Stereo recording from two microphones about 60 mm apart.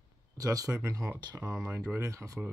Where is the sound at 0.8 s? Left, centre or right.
Right.